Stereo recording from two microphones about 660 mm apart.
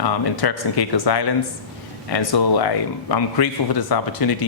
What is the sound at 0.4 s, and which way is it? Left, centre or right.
Speech, left.